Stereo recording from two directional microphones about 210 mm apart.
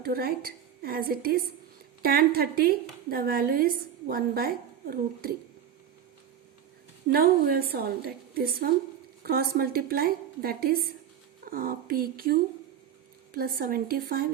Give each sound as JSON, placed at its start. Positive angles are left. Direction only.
{"t": 0.0, "sound": "a woman's voice", "side_deg": -45}
{"t": 7.1, "sound": "a woman's voice", "side_deg": -45}